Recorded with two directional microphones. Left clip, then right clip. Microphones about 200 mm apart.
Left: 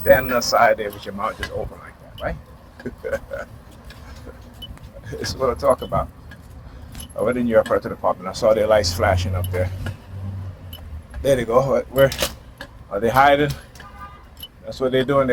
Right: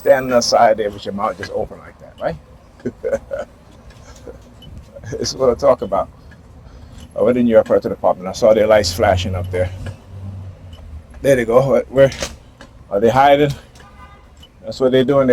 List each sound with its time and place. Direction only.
0.0 s speech: 60° right (ahead or behind)
2.8 s speech: 60° right (ahead or behind)
5.0 s speech: 60° right (ahead or behind)
7.2 s speech: 65° right (ahead or behind)
11.2 s speech: 65° right (ahead or behind)
14.6 s speech: 60° right (ahead or behind)